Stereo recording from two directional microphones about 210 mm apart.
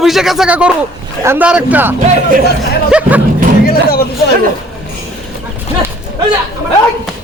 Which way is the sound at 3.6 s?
45° left (ahead or behind).